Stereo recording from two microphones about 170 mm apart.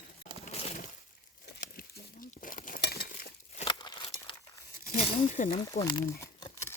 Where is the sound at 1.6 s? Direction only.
60° left (ahead or behind).